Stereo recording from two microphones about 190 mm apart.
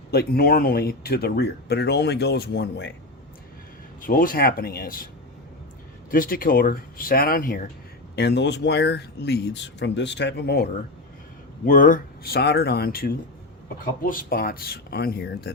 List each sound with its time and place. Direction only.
0.1 s speech: 55° left (ahead or behind)
4.0 s speech: 45° left (ahead or behind)
6.1 s speech: 50° left (ahead or behind)
8.1 s speech: 60° left (ahead or behind)
11.6 s speech: 45° left (ahead or behind)